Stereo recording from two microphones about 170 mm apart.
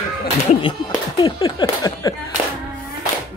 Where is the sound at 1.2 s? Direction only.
25° left (ahead or behind).